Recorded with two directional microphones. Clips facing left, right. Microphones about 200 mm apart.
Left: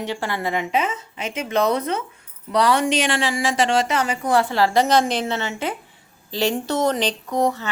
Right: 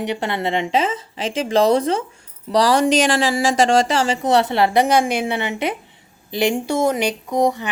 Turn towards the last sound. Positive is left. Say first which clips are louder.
# right 3 dB
turn(degrees=-15)  # may be behind; listen again after turning